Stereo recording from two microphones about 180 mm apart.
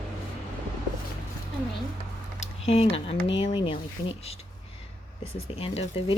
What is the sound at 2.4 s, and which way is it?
Speech, 35° left (ahead or behind).